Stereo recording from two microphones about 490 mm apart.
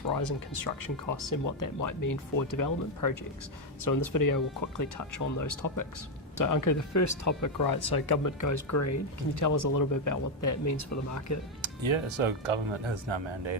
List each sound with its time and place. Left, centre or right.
0.1 s speech: left
11.6 s speech: right